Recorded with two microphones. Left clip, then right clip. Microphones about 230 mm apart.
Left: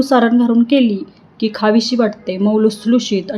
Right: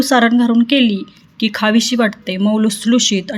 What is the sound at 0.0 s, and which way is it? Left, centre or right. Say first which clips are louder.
A woman's voice: even; right.